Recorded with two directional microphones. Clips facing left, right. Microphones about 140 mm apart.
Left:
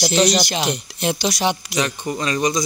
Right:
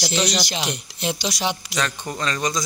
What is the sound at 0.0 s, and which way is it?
Speech, 50° left (ahead or behind).